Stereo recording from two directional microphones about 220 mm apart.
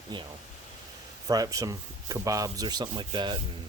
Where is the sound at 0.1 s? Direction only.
20° right (ahead or behind).